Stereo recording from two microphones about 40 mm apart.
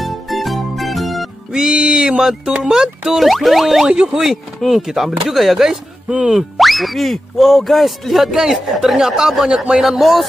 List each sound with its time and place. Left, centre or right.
0.0 s music: centre
1.5 s music: right
2.6 s speech: centre
3.1 s speech: centre
3.8 s speech: right
4.1 s speech: centre
5.7 s speech: centre
6.6 s speech: centre